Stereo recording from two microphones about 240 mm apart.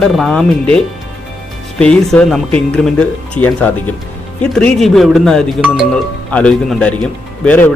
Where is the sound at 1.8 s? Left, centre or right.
Centre.